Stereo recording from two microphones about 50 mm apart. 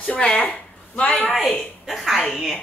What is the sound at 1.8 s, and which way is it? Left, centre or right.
Chuckle, centre.